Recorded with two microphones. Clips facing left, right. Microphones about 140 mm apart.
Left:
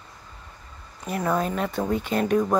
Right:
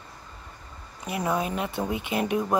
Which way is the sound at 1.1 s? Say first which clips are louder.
Left 2 dB; 10° right (ahead or behind).